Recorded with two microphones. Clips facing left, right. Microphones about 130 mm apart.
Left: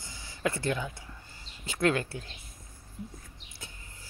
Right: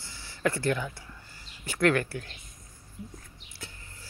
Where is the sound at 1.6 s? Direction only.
20° left (ahead or behind).